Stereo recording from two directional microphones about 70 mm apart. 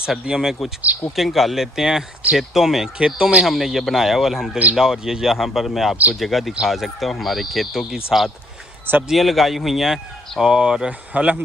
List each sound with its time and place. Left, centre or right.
0.1 s a man's voice: centre
3.4 s a man's voice: centre
11.1 s speech: right